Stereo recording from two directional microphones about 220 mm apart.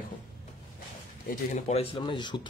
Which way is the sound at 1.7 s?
25° left (ahead or behind).